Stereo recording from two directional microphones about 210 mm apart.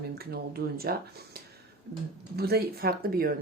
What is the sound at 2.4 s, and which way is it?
Speech, 50° right (ahead or behind).